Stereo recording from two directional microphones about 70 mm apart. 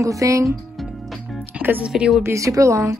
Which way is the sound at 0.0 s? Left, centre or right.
Right.